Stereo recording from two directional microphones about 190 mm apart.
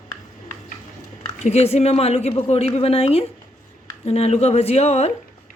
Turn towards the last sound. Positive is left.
turn(degrees=35)  # may be behind; listen again after turning